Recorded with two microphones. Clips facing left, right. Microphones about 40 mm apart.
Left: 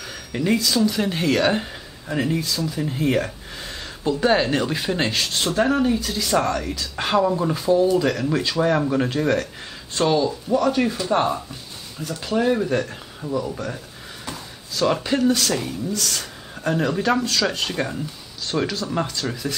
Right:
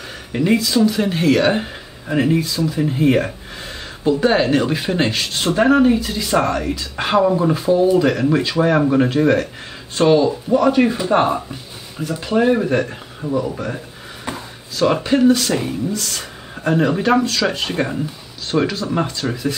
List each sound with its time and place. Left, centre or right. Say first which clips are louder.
0.3 s speech: right 4 dB; centre
5.5 s speech: right 7 dB; centre
14.8 s speech: right 5 dB; centre